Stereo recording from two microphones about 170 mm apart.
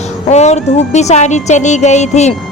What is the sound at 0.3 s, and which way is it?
Speech, 40° left (ahead or behind).